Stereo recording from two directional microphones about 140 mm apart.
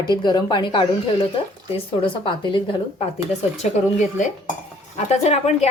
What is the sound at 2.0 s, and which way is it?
Speech, 35° left (ahead or behind).